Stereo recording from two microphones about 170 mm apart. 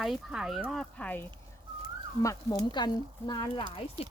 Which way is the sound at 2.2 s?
20° left (ahead or behind).